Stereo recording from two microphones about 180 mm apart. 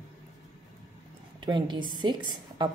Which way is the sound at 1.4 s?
25° right (ahead or behind).